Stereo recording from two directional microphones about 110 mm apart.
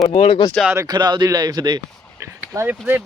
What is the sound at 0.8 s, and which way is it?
Speech, 40° right (ahead or behind).